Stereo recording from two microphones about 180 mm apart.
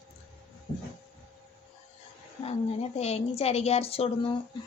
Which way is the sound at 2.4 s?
35° left (ahead or behind).